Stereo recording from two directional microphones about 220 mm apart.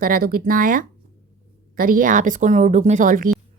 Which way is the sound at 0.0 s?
40° right (ahead or behind).